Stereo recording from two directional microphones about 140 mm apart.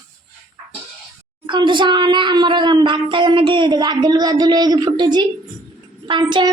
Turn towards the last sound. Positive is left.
turn(degrees=-35)  # may be behind; listen again after turning